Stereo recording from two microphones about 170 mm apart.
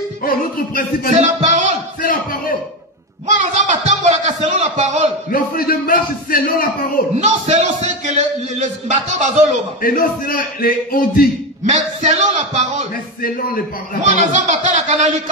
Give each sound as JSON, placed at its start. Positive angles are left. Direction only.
{"t": 0.2, "sound": "a man's voice", "side_deg": 55}
{"t": 1.1, "sound": "a man's voice", "side_deg": -45}
{"t": 3.3, "sound": "a man's voice", "side_deg": -45}
{"t": 5.3, "sound": "a man's voice", "side_deg": 60}
{"t": 7.2, "sound": "a man's voice", "side_deg": -45}
{"t": 9.8, "sound": "a man's voice", "side_deg": 55}
{"t": 11.6, "sound": "a man's voice", "side_deg": -45}
{"t": 14.3, "sound": "a man's voice", "side_deg": -45}